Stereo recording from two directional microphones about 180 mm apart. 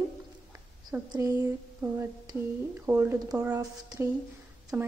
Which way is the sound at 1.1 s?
15° right (ahead or behind).